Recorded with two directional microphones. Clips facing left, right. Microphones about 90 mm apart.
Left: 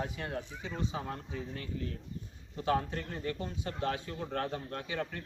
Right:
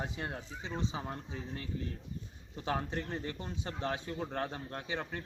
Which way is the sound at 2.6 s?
20° right (ahead or behind).